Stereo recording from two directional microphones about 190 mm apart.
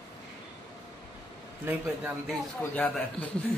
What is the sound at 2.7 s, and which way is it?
Speech, 5° left (ahead or behind).